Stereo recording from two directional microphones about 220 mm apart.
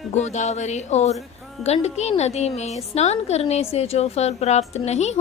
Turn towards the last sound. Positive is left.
turn(degrees=30)  # may be behind; listen again after turning